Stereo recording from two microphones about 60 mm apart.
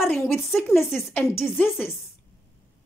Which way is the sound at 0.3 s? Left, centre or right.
Centre.